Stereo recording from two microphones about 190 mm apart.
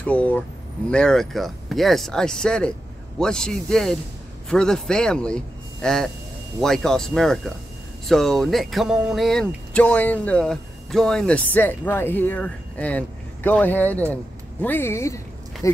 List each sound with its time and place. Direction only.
0.0 s speech: 5° left (ahead or behind)